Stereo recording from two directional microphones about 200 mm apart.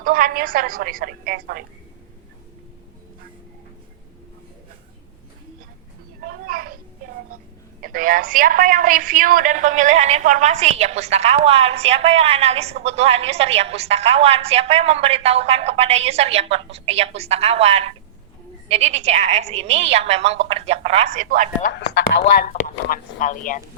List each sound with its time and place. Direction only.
0.0 s a woman's voice: 45° right (ahead or behind)
6.2 s a sound: 45° right (ahead or behind)
7.8 s a woman's voice: 45° right (ahead or behind)
21.6 s speech: 60° left (ahead or behind)
22.4 s speech: 40° left (ahead or behind)